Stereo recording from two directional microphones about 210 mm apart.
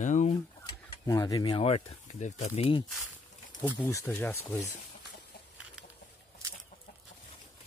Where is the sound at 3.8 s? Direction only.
10° left (ahead or behind).